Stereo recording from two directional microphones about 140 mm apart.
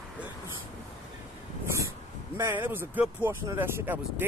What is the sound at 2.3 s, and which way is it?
Speech, 15° right (ahead or behind).